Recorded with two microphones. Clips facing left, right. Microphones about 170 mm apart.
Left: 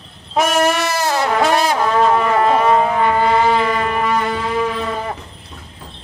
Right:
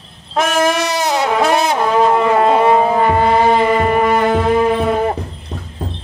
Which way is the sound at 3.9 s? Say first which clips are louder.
Right 5 dB; 45° right (ahead or behind).